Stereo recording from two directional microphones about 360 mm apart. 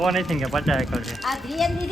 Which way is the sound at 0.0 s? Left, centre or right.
Centre.